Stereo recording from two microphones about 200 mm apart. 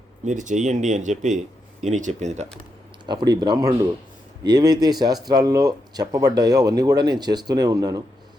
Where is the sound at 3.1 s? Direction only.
20° right (ahead or behind).